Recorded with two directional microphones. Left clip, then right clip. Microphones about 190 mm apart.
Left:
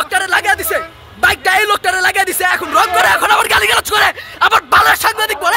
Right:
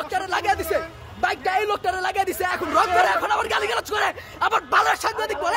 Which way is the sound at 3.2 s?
15° left (ahead or behind).